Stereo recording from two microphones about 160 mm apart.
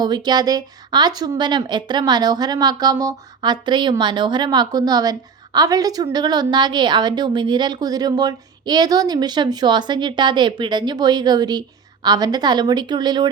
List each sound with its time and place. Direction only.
0.0 s speech: 25° right (ahead or behind)